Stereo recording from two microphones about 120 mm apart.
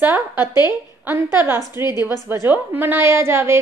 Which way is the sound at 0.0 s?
20° right (ahead or behind).